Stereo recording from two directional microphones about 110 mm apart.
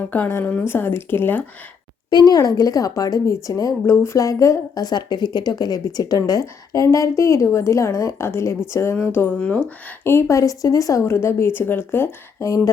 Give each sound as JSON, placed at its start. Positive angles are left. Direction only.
{"t": 0.1, "sound": "speech", "side_deg": 20}
{"t": 2.0, "sound": "speech", "side_deg": 40}